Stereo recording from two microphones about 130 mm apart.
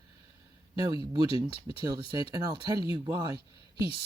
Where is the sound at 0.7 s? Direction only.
30° right (ahead or behind).